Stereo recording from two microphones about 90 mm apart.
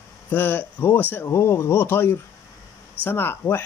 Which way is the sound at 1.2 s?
30° left (ahead or behind).